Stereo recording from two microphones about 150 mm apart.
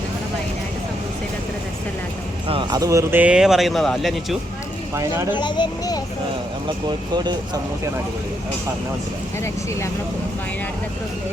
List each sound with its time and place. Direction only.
2.5 s speech: 30° right (ahead or behind); by 4.4 s centre (ahead or behind)
4.9 s speech: 20° right (ahead or behind)
5.3 s a child's voice: 30° left (ahead or behind)